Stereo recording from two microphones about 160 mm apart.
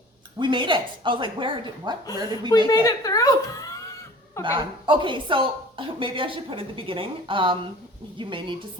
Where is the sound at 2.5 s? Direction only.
25° left (ahead or behind).